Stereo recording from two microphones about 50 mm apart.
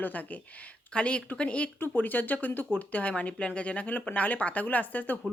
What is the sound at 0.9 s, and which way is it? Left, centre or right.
Speech, left.